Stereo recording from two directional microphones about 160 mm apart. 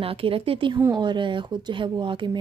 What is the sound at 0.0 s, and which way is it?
Speech, 35° right (ahead or behind).